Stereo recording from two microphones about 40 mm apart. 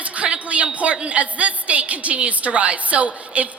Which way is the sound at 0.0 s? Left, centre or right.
Right.